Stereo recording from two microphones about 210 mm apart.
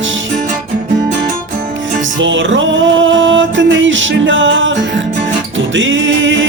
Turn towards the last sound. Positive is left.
turn(degrees=-60)  # may be behind; listen again after turning